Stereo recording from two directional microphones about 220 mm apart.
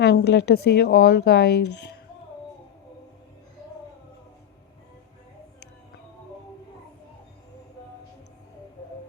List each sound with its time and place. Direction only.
0.0 s a woman's voice: 50° left (ahead or behind)